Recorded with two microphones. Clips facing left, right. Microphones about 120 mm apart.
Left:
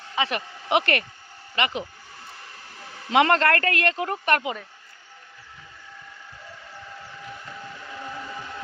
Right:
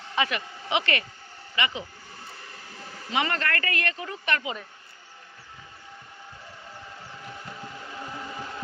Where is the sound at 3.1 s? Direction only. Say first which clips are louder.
Left 9 dB; 75° left (ahead or behind).